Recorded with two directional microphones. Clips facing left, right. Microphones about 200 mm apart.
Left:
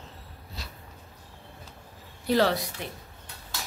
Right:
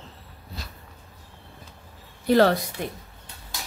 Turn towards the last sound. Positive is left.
turn(degrees=-20)  # may be behind; listen again after turning